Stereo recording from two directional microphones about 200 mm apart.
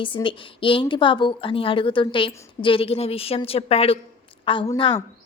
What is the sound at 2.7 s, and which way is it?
Speech, 30° left (ahead or behind).